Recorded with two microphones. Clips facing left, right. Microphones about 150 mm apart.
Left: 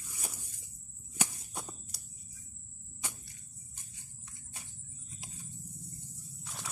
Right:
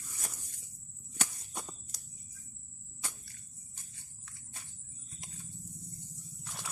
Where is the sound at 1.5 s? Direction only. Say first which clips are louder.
Left 1 dB; 5° left (ahead or behind).